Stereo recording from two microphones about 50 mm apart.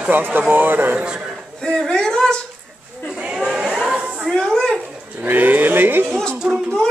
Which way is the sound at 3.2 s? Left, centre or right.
Right.